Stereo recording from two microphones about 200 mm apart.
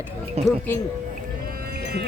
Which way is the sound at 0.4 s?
30° right (ahead or behind).